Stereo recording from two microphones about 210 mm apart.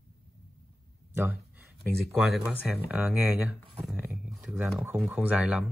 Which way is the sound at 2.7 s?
5° right (ahead or behind).